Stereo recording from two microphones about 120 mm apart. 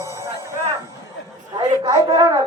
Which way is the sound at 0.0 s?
25° right (ahead or behind).